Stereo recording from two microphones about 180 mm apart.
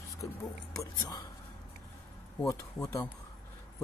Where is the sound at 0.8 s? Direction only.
20° left (ahead or behind).